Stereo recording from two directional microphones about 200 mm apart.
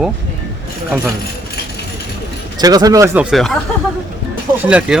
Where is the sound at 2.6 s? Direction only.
20° right (ahead or behind).